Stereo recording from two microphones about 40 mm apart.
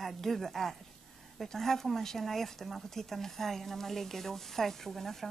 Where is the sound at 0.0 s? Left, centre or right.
Centre.